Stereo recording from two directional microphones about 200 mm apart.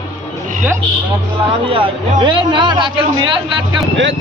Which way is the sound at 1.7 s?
25° right (ahead or behind).